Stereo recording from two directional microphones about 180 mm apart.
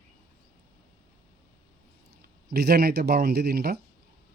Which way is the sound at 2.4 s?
65° right (ahead or behind).